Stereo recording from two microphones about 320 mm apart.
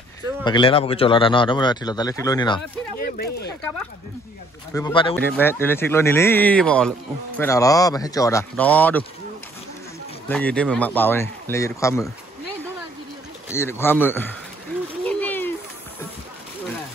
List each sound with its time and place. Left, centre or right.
0.4 s speech: centre
3.0 s speech: left
4.7 s speech: centre
10.2 s speech: centre
13.5 s speech: centre
15.0 s a sound: centre